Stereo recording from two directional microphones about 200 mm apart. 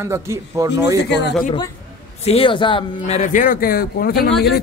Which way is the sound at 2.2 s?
25° left (ahead or behind).